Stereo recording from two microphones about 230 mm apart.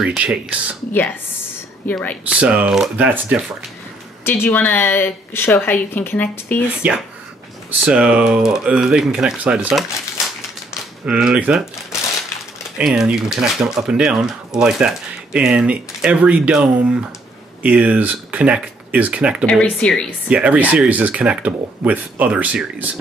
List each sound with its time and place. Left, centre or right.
0.0 s speech: centre
1.9 s a woman's voice: centre
2.2 s speech: centre
4.2 s a woman's voice: centre
6.8 s speech: centre
11.1 s speech: centre
12.7 s speech: centre
19.4 s speech: centre